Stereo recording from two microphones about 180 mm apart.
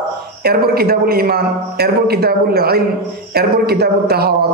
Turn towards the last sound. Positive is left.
turn(degrees=-60)  # may be behind; listen again after turning